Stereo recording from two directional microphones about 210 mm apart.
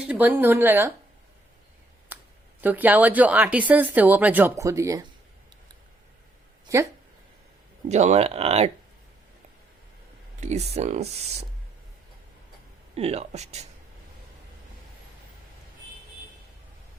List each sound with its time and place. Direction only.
0.0 s a woman's voice: 5° right (ahead or behind)
2.1 s a sound: 10° right (ahead or behind)
2.6 s a woman's voice: 10° right (ahead or behind)
7.9 s speech: 35° right (ahead or behind)
10.4 s speech: 30° right (ahead or behind)
12.9 s speech: 30° right (ahead or behind)